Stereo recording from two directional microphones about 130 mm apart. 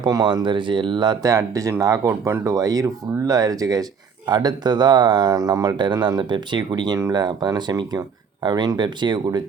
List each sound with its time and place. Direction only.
0.0 s speech: 30° right (ahead or behind)